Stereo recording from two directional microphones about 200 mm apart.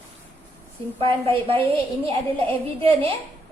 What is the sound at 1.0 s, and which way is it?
A child's voice, 25° right (ahead or behind).